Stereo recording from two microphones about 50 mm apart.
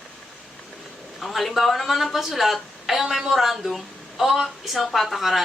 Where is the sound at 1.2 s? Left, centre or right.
Centre.